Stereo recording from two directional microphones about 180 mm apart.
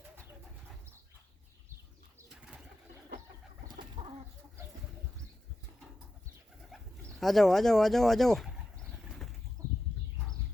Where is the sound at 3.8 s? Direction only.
30° right (ahead or behind).